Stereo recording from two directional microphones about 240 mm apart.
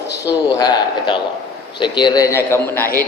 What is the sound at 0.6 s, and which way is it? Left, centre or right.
A man's voice, centre.